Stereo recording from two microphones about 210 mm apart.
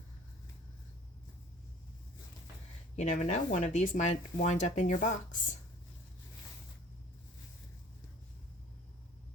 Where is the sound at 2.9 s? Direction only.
35° left (ahead or behind).